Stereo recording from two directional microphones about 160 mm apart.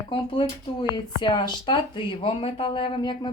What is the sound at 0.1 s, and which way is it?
Speech, 35° left (ahead or behind).